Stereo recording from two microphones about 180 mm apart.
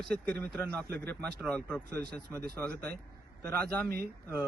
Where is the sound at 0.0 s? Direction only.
5° left (ahead or behind).